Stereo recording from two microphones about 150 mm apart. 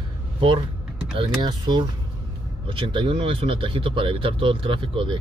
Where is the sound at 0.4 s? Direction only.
35° right (ahead or behind).